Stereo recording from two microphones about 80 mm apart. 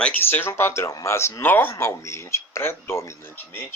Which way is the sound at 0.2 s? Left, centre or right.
Left.